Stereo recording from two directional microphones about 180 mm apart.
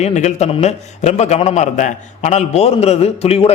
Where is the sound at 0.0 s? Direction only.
40° left (ahead or behind).